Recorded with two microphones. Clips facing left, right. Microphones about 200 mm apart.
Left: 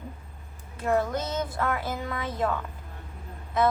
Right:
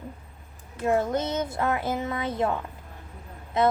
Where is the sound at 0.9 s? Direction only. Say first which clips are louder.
Right 2 dB; 25° right (ahead or behind).